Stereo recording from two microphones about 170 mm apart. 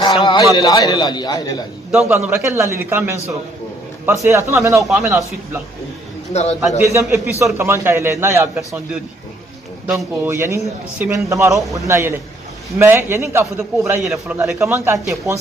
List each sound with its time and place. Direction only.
0.0 s a sound: 25° left (ahead or behind)
0.6 s a man's voice: 25° left (ahead or behind)
1.9 s a man's voice: 5° right (ahead or behind)
2.1 s a man's voice: 15° right (ahead or behind)
6.3 s a man's voice: 40° left (ahead or behind)
7.5 s a man's voice: 15° right (ahead or behind)
9.9 s a man's voice: 15° right (ahead or behind)